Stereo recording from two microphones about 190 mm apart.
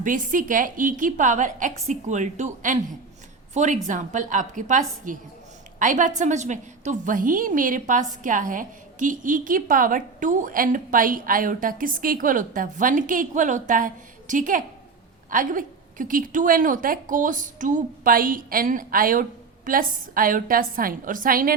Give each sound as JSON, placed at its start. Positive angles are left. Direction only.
{"t": 0.0, "sound": "a woman's voice", "side_deg": -45}